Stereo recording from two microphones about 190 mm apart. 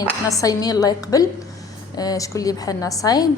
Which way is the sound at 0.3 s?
20° left (ahead or behind).